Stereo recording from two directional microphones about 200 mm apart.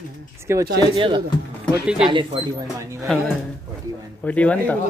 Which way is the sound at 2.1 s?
25° right (ahead or behind).